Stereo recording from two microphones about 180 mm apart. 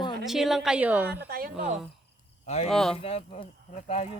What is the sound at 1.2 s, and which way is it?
Speech, 55° right (ahead or behind).